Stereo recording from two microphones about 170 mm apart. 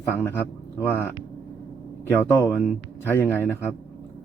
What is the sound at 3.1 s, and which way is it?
Speech, 15° left (ahead or behind).